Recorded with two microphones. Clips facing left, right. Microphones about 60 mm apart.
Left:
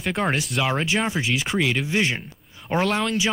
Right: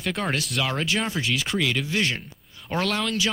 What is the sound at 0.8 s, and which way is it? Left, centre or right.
Speech, centre.